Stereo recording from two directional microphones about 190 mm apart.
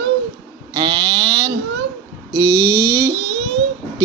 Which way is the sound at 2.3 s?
20° right (ahead or behind).